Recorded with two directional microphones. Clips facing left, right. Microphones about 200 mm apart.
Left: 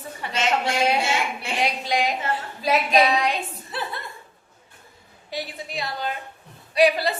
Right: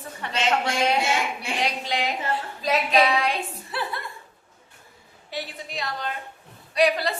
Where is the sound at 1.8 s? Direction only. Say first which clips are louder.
Left 3 dB; 10° left (ahead or behind).